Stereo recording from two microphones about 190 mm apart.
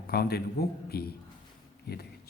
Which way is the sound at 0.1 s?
55° left (ahead or behind).